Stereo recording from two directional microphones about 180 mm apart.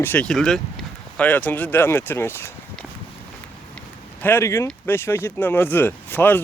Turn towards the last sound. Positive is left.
turn(degrees=10)  # may be behind; listen again after turning